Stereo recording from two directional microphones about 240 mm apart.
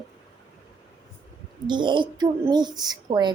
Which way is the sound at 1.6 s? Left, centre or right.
Centre.